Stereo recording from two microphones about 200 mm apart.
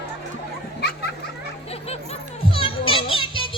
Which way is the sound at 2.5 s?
25° left (ahead or behind).